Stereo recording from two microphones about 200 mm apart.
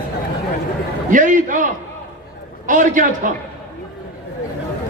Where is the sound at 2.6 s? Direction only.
40° right (ahead or behind).